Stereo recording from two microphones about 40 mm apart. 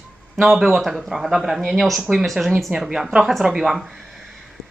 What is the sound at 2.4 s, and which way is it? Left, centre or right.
Speech, right.